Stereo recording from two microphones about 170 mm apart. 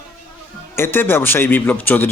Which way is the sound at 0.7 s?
15° left (ahead or behind).